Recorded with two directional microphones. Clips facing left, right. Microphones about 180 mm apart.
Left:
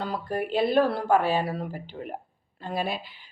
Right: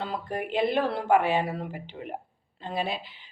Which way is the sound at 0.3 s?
20° right (ahead or behind).